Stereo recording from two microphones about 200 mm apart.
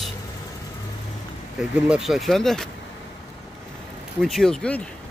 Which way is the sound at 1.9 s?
Centre (ahead or behind).